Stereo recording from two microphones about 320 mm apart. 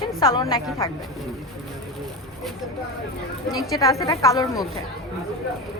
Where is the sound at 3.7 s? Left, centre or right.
Centre.